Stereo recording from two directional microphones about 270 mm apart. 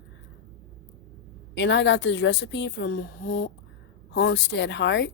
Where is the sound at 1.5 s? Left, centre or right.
Left.